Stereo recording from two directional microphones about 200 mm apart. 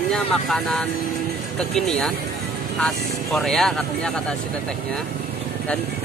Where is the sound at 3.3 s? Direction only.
Centre (ahead or behind).